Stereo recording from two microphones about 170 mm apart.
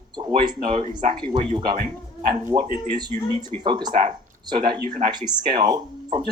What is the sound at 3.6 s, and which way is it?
Speech, 25° right (ahead or behind).